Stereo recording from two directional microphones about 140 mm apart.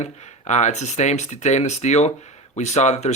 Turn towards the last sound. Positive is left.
turn(degrees=55)  # may be behind; listen again after turning